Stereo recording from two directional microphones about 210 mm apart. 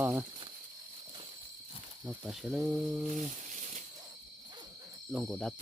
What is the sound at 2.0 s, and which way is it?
Speech, 5° right (ahead or behind).